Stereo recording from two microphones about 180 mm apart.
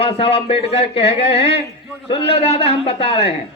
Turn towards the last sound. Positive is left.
turn(degrees=35)  # may be behind; listen again after turning